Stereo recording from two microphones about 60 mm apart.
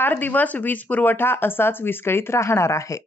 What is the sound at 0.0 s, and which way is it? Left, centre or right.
Speech, left.